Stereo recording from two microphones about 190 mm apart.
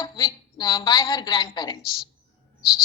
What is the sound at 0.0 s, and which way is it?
A woman's voice, 20° left (ahead or behind).